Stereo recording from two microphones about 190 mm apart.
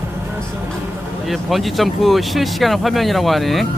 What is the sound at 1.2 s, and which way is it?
Speech, centre (ahead or behind).